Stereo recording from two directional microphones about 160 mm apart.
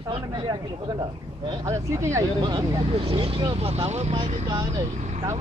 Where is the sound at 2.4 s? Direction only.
30° right (ahead or behind).